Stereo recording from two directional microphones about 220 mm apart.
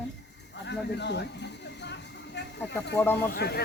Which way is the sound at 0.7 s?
50° left (ahead or behind).